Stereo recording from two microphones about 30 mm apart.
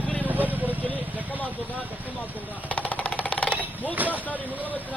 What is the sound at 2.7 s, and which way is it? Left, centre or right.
Jackhammer, left.